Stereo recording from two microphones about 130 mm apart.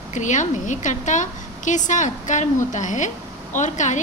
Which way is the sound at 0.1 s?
70° left (ahead or behind).